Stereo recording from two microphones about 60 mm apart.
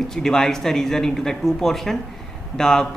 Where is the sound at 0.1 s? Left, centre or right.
Centre.